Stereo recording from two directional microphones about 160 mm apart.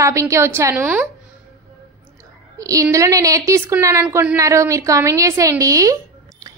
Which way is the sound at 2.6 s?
20° right (ahead or behind).